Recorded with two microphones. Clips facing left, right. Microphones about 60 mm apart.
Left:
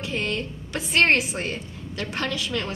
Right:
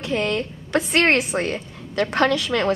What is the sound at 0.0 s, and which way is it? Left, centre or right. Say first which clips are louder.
A woman's voice: right 5 dB; right.